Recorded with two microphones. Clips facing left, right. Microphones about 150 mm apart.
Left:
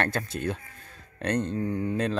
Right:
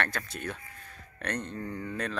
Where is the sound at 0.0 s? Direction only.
30° left (ahead or behind).